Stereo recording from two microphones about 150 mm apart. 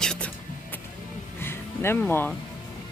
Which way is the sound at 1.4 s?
15° left (ahead or behind).